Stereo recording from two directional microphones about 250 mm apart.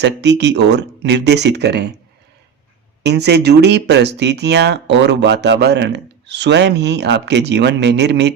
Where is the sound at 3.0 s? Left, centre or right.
Right.